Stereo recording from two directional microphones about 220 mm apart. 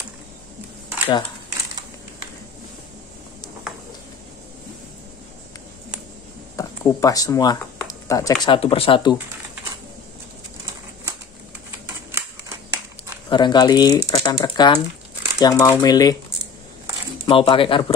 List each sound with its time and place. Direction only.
6.5 s speech: 15° left (ahead or behind)
12.1 s typewriter: 10° right (ahead or behind)
13.3 s speech: 20° left (ahead or behind)
17.3 s speech: 25° left (ahead or behind)